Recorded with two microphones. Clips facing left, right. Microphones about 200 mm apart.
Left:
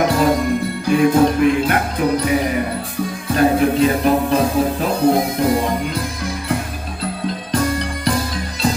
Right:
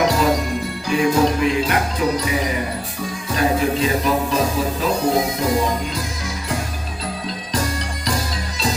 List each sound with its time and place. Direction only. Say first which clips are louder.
0.0 s music: left 2 dB; 55° left (ahead or behind)